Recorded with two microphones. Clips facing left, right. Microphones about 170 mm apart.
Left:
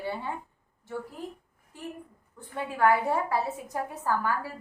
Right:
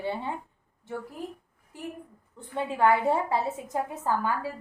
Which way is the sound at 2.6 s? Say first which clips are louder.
Right 1 dB; 20° right (ahead or behind).